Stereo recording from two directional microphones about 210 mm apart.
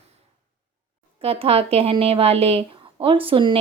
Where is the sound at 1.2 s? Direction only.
25° right (ahead or behind).